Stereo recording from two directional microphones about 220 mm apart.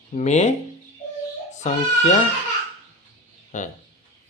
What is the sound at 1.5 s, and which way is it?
Speech, 35° left (ahead or behind).